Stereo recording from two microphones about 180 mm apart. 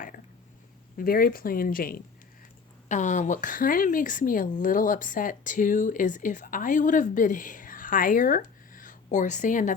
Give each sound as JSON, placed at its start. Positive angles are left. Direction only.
{"t": 0.9, "sound": "a woman's voice", "side_deg": 55}
{"t": 2.9, "sound": "a woman's voice", "side_deg": 40}